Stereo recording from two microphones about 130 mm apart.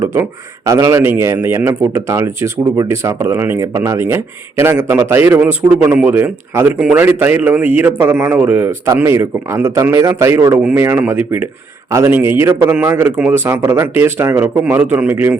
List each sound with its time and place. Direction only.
0.0 s a man's voice: 20° right (ahead or behind)
10.6 s a man's voice: 10° right (ahead or behind)